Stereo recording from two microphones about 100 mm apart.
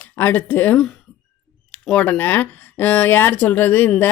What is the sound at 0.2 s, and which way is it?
Speech, 20° left (ahead or behind).